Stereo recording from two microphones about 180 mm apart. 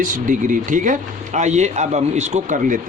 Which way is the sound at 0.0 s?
45° right (ahead or behind).